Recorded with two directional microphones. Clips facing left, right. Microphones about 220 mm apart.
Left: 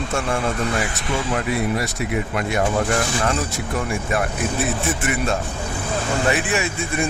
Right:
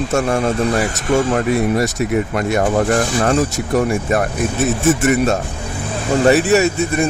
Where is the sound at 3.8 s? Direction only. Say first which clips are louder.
Right 7 dB; 40° right (ahead or behind).